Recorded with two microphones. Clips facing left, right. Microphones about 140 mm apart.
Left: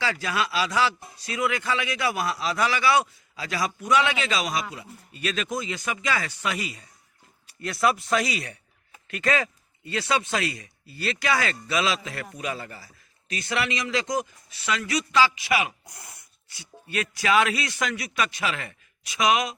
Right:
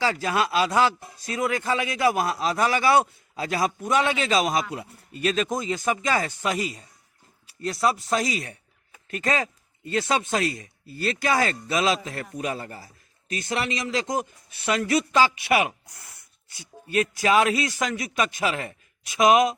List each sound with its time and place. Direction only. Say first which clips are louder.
0.0 s a man's voice: right 3 dB; 40° right (ahead or behind); by 15.7 s 55° right (ahead or behind)
16.6 s a man's voice: right 6 dB; 40° right (ahead or behind)